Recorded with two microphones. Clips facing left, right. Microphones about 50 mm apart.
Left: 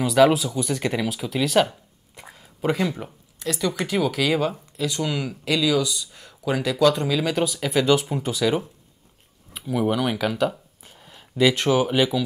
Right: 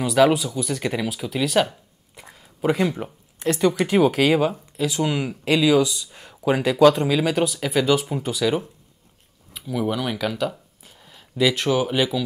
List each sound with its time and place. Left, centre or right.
0.0 s speech: centre
3.3 s speech: right
4.5 s speech: centre
5.0 s speech: right; by 8.5 s centre
9.5 s speech: centre